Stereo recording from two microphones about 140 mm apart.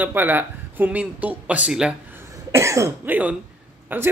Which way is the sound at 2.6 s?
20° right (ahead or behind).